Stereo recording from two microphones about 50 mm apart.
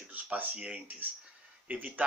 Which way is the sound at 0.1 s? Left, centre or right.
Right.